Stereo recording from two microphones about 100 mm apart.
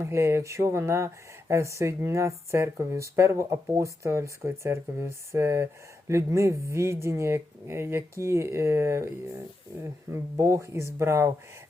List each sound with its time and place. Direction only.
0.0 s speech: 30° right (ahead or behind)